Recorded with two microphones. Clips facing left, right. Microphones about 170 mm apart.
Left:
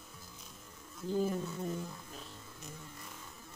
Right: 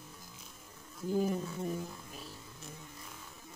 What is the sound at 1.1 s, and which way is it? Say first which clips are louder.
Speech: right 1 dB; 10° right (ahead or behind).